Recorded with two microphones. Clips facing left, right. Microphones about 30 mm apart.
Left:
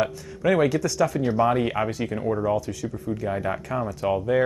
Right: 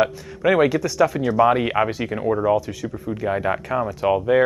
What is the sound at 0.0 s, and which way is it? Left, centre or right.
Speech, right.